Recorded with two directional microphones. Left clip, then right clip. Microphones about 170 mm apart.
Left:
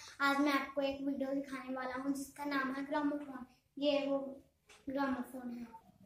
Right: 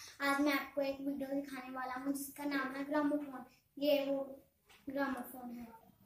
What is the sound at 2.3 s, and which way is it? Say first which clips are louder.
Speech: left 2 dB; 15° left (ahead or behind).